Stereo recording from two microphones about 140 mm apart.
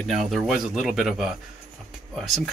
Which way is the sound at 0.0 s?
Centre (ahead or behind).